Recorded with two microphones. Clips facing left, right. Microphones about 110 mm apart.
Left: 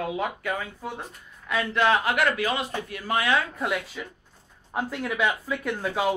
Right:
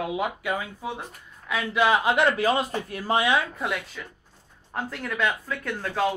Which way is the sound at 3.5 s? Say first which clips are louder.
Left 2 dB; centre (ahead or behind).